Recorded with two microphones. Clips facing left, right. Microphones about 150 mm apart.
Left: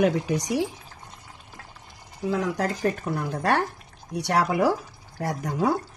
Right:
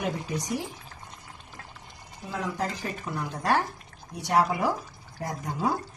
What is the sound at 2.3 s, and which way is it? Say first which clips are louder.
Speech: left 4 dB; 85° left.